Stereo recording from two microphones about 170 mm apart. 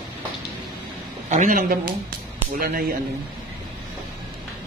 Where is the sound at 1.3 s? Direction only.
50° right (ahead or behind).